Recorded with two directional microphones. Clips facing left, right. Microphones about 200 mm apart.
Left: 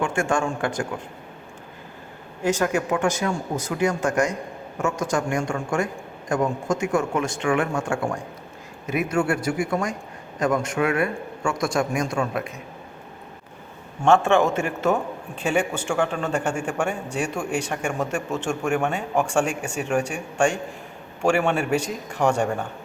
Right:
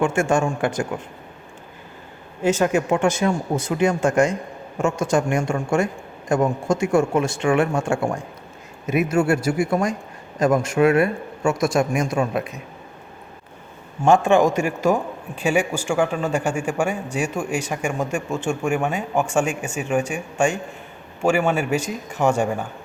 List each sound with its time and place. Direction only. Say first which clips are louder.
0.0 s a man's voice: right 4 dB; 20° right (ahead or behind)
2.4 s a man's voice: right 3 dB; 25° right (ahead or behind)
14.0 s a man's voice: right 2 dB; 15° right (ahead or behind)